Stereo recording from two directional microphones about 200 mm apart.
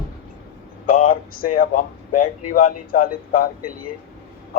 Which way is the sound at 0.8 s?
40° left (ahead or behind).